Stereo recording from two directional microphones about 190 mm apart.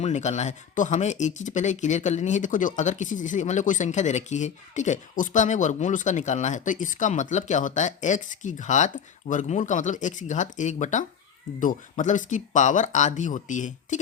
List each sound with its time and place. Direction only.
0.0 s speech: 35° left (ahead or behind)